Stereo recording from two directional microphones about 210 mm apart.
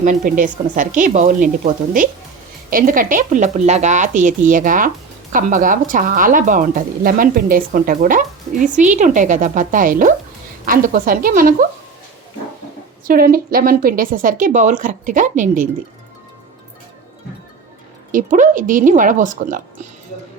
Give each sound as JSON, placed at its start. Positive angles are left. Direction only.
{"t": 0.0, "sound": "speech", "side_deg": -40}
{"t": 13.1, "sound": "speech", "side_deg": -45}
{"t": 18.1, "sound": "speech", "side_deg": -40}